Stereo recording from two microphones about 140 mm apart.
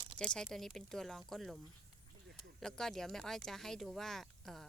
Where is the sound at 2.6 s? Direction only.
5° left (ahead or behind).